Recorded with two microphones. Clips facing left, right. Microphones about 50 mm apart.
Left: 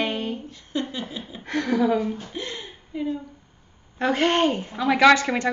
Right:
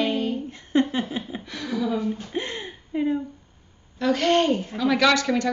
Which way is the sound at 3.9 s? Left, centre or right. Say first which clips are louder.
Right 1 dB; left.